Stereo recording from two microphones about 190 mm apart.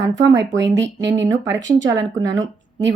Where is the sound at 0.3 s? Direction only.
70° right (ahead or behind).